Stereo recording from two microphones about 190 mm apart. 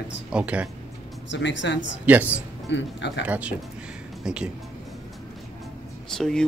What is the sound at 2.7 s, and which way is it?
Speech, 70° left (ahead or behind).